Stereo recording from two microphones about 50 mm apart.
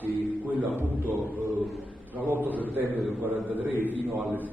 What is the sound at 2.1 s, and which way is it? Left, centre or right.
A man's voice, right.